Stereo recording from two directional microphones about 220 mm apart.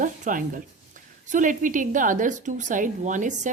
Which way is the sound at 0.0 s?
35° right (ahead or behind).